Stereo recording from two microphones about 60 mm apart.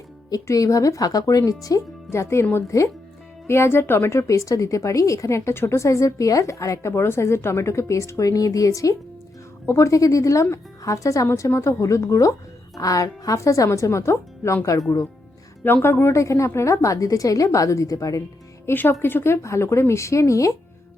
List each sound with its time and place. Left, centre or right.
0.4 s speech: left
2.0 s speech: left
3.4 s speech: left
4.3 s a woman's voice: left
6.9 s a woman's voice: left
11.3 s a woman's voice: left
15.6 s a woman's voice: left
18.6 s speech: left